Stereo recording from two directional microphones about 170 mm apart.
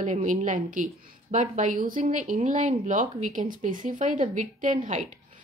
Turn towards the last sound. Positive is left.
turn(degrees=-45)  # may be behind; listen again after turning